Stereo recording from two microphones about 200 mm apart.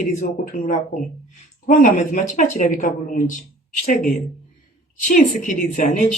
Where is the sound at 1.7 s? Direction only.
40° left (ahead or behind).